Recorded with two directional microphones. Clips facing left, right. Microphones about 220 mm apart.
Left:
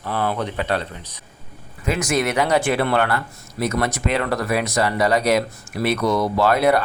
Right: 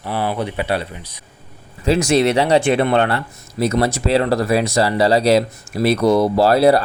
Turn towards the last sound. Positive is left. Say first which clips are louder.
# right 4 dB
turn(degrees=-35)  # may be behind; listen again after turning